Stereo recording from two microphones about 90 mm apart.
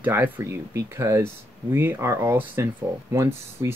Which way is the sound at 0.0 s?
20° right (ahead or behind).